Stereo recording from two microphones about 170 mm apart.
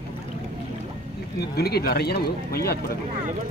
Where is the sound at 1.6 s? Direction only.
65° left (ahead or behind).